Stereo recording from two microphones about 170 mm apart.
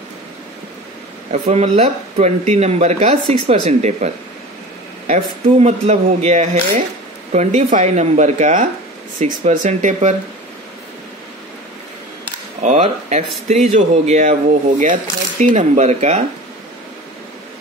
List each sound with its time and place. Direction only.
1.3 s speech: 40° right (ahead or behind)
12.6 s speech: 40° right (ahead or behind)